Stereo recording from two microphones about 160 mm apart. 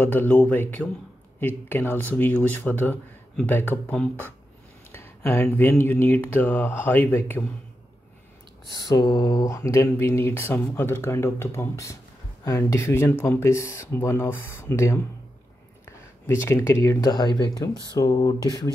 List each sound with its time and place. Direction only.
0.0 s speech: 10° left (ahead or behind)
8.7 s speech: 25° left (ahead or behind)
16.3 s speech: 15° left (ahead or behind)